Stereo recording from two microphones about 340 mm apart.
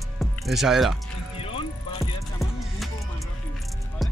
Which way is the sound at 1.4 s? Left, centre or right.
Centre.